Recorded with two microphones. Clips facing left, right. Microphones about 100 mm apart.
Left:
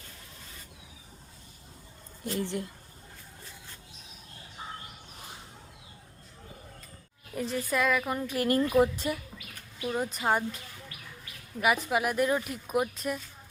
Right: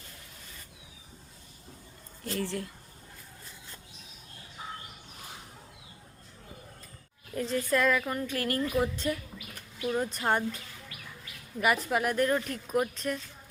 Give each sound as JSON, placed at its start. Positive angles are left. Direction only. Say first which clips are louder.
{"t": 2.2, "sound": "a woman's voice", "louder": "left 1 dB", "side_deg": 20}
{"t": 7.3, "sound": "speech", "louder": "right 1 dB", "side_deg": 10}
{"t": 8.1, "sound": "a woman's voice", "louder": "left 4 dB", "side_deg": 20}
{"t": 9.8, "sound": "speech", "louder": "even", "side_deg": 5}
{"t": 11.6, "sound": "speech", "louder": "left 1 dB", "side_deg": 5}